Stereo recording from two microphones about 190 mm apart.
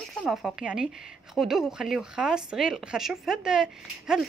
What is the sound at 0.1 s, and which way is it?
Speech, centre (ahead or behind).